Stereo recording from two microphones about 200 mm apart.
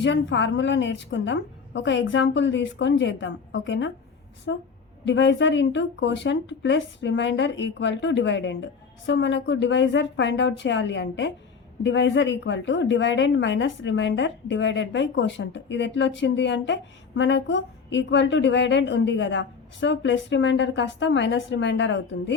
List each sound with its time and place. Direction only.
0.0 s a woman's voice: 65° left (ahead or behind)